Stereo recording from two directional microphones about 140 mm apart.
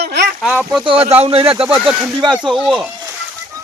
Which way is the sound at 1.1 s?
45° right (ahead or behind).